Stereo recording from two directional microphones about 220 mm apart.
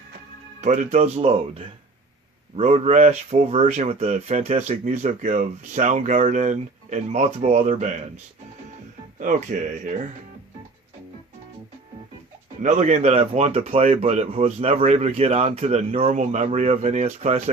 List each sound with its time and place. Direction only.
0.6 s speech: 30° right (ahead or behind)
12.6 s speech: 35° right (ahead or behind)